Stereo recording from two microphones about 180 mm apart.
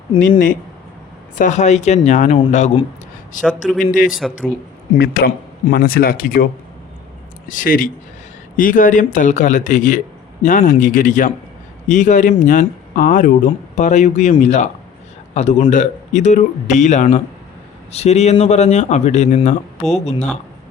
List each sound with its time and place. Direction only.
1.4 s speech: 40° left (ahead or behind)
3.4 s a man's voice: centre (ahead or behind)
3.9 s speech: 50° left (ahead or behind)